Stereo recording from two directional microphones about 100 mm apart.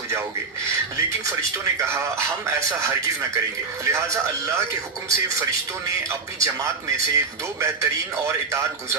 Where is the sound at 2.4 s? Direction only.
35° right (ahead or behind).